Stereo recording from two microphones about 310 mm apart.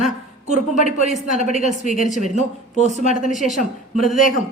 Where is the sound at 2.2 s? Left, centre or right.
Left.